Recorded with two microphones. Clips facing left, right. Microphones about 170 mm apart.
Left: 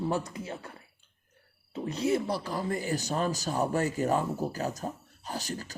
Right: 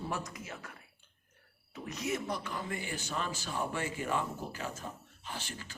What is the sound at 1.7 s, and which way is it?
A man's voice, 30° left (ahead or behind).